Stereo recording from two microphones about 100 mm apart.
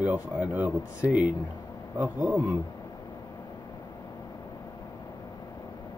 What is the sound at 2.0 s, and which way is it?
Speech, 15° right (ahead or behind).